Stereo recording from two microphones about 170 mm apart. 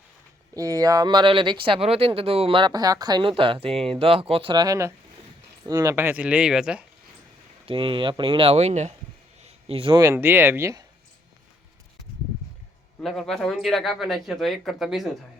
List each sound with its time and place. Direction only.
0.5 s speech: 20° right (ahead or behind); by 6.8 s 5° right (ahead or behind)
7.7 s speech: 30° right (ahead or behind)
9.4 s a sound: 35° right (ahead or behind)
10.0 s speech: 15° right (ahead or behind)
13.0 s speech: centre (ahead or behind)